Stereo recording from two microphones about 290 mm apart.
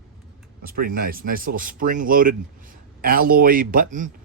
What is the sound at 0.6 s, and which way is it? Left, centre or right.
Speech, right.